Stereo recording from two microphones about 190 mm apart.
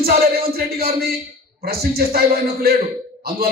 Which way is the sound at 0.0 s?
50° right (ahead or behind).